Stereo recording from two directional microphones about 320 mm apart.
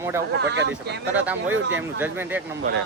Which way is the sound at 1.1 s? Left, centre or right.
Centre.